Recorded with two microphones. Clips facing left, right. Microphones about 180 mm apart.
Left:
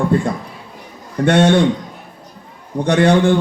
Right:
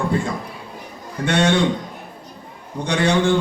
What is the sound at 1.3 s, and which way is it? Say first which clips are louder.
Speech: left 6 dB; 55° left (ahead or behind).